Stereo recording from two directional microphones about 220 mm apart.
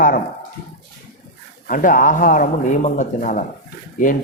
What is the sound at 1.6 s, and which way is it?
A man's voice, 40° left (ahead or behind).